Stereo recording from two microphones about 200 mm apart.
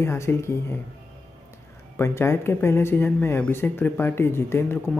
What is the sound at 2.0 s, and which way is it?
Speech, 15° left (ahead or behind).